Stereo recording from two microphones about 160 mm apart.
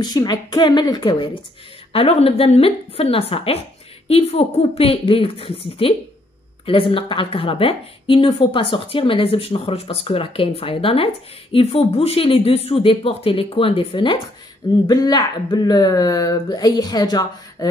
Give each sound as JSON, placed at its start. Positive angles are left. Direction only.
{"t": 0.0, "sound": "a woman's voice", "side_deg": 25}